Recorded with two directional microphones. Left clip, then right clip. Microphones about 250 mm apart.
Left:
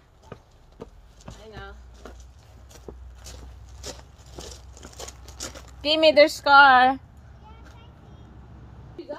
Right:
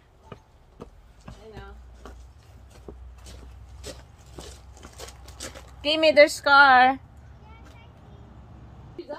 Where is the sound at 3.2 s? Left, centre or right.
Left.